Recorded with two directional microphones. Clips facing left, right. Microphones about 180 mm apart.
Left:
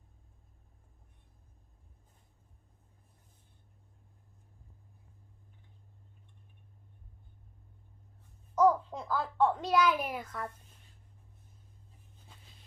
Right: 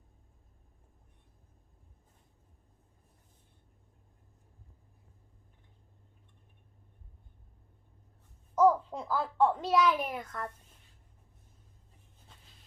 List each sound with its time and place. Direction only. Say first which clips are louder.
8.5 s a child's voice: right 1 dB; 5° right (ahead or behind)